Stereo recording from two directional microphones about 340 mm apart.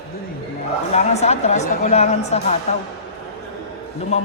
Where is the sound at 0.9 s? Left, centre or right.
Centre.